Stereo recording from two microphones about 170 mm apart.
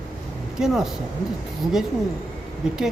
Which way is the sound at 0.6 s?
5° right (ahead or behind).